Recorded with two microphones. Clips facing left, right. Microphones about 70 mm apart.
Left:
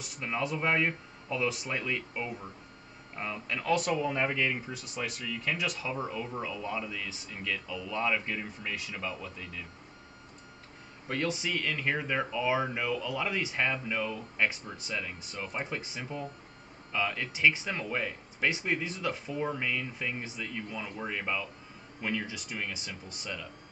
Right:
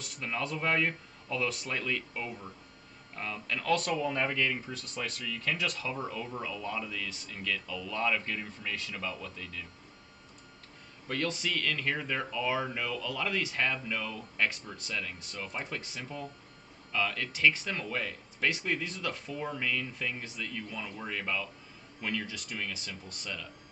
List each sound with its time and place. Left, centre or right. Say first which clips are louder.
0.0 s speech: left 2 dB; centre
11.1 s speech: left 1 dB; centre